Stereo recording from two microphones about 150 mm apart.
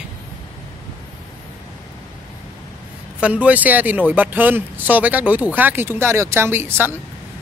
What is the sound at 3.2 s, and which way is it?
A man's voice, 10° right (ahead or behind).